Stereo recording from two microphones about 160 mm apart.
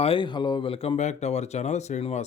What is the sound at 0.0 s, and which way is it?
Speech, 30° left (ahead or behind).